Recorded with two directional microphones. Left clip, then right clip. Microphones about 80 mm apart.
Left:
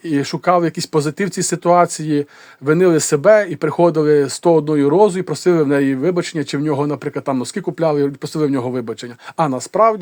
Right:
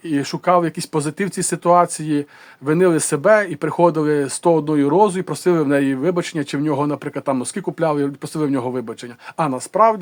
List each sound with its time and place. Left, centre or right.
0.0 s speech: left
9.6 s speech: left